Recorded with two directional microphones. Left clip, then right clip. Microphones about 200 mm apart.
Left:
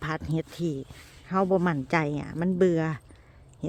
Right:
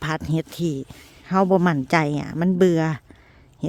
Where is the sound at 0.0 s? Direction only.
60° right (ahead or behind).